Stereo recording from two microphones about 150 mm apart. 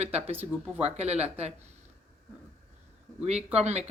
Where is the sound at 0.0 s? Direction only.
45° right (ahead or behind).